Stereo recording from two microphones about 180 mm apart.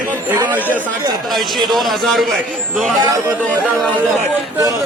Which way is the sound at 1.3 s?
Centre (ahead or behind).